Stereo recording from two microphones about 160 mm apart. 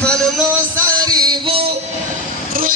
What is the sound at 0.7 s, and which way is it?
Music, 20° right (ahead or behind).